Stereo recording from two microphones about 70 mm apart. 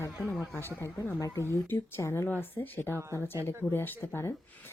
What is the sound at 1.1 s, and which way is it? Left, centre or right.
Speech, left.